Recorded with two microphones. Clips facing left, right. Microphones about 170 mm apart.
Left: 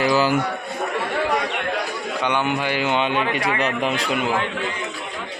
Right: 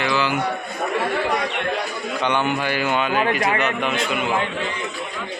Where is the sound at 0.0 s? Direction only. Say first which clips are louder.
Left 3 dB; 40° left (ahead or behind).